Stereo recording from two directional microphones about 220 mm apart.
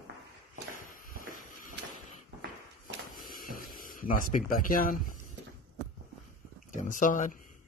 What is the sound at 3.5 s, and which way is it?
Speech, 40° left (ahead or behind).